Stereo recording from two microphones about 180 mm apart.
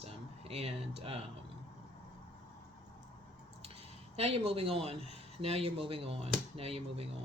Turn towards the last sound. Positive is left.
turn(degrees=-35)  # may be behind; listen again after turning